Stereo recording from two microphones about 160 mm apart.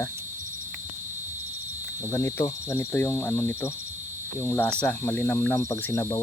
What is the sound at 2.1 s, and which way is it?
Cricket, 20° left (ahead or behind).